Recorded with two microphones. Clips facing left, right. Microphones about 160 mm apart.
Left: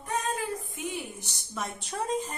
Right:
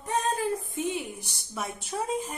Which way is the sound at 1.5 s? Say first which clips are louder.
Right 1 dB; 10° right (ahead or behind).